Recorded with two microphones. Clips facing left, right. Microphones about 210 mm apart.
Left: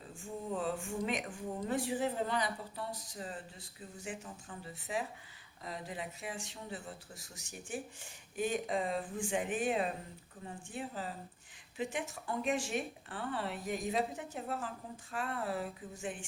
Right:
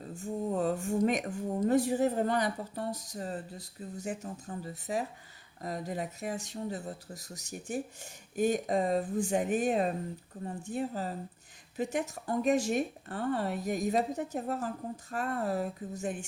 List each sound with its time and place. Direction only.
0.1 s speech: 40° right (ahead or behind)